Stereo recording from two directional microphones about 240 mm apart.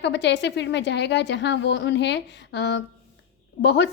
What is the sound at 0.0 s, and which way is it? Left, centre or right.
A woman's voice, left.